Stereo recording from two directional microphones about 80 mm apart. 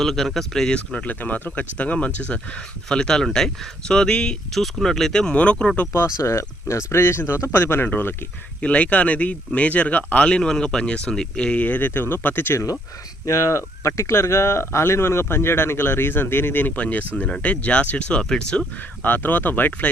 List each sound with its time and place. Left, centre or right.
0.0 s speech: centre
6.1 s speech: left
8.6 s speech: centre
13.2 s speech: left; by 18.6 s centre
19.0 s speech: left